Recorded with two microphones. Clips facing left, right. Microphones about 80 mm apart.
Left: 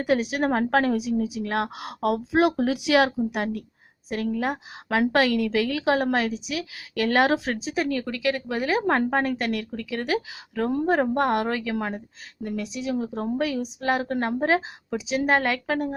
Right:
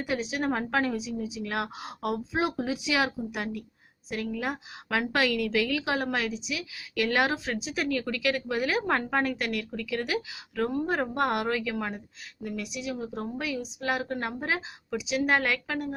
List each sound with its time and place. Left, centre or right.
0.0 s a woman's voice: left
1.8 s a woman's voice: left
4.1 s a woman's voice: left